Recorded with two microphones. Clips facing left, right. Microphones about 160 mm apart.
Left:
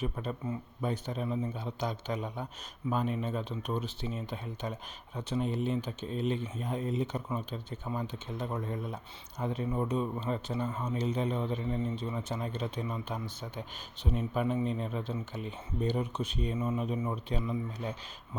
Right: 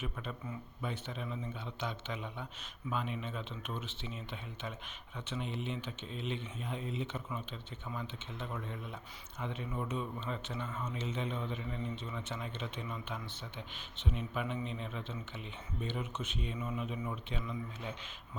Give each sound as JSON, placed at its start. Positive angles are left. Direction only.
{"t": 0.0, "sound": "speech", "side_deg": 35}